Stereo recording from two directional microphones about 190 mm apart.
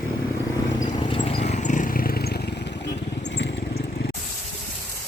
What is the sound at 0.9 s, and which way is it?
Vehicle, 25° left (ahead or behind).